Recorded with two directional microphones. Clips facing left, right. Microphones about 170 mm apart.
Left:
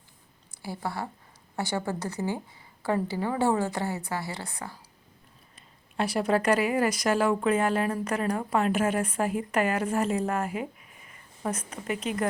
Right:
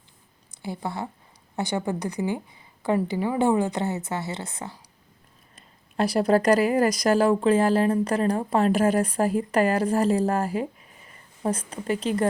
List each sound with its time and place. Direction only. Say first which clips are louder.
0.5 s a woman's voice: right 2 dB; 20° right (ahead or behind)
5.5 s a woman's voice: right 4 dB; 40° right (ahead or behind)